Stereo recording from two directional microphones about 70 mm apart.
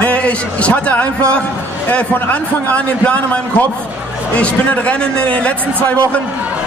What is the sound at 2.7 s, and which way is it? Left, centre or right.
A man's voice, left.